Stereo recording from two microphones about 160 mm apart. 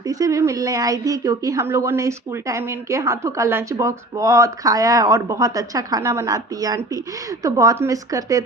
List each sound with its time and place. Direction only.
0.0 s a woman's voice: 20° right (ahead or behind)